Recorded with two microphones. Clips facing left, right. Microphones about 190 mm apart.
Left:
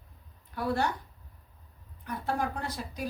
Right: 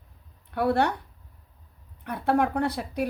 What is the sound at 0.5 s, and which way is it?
Speech, 65° right (ahead or behind).